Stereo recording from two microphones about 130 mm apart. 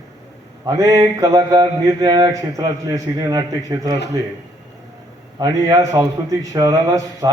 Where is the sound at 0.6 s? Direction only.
25° right (ahead or behind).